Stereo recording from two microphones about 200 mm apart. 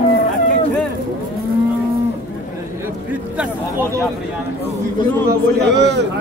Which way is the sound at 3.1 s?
10° right (ahead or behind).